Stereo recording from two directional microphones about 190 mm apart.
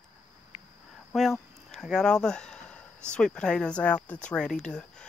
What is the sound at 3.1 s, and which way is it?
Speech, 5° left (ahead or behind).